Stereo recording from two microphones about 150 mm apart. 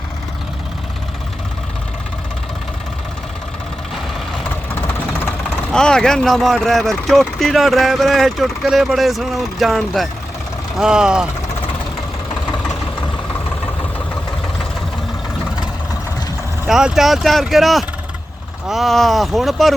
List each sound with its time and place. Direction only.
4.7 s vehicle: 10° left (ahead or behind)
5.7 s speech: 5° left (ahead or behind)
16.6 s speech: 5° right (ahead or behind)